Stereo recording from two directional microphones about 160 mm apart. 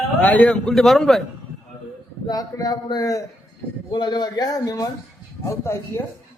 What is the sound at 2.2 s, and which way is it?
Speech, 25° left (ahead or behind).